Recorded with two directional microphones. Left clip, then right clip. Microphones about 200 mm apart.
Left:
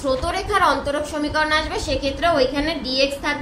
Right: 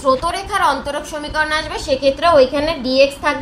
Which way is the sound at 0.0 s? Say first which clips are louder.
Right 5 dB; 60° right (ahead or behind).